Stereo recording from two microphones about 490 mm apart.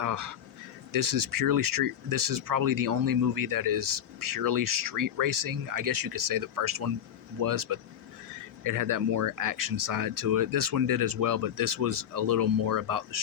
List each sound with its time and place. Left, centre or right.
0.0 s speech: right